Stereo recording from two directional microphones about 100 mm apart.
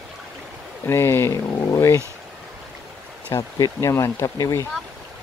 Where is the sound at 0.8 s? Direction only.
25° left (ahead or behind).